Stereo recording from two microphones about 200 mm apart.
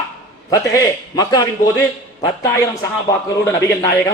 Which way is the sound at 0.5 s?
15° left (ahead or behind).